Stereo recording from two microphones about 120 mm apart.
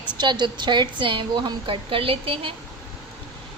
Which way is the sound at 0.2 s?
40° right (ahead or behind).